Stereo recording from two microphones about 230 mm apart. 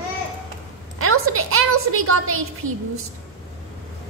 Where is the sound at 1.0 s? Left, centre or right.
Right.